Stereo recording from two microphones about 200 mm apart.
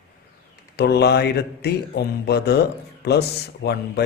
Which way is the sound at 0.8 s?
55° left (ahead or behind).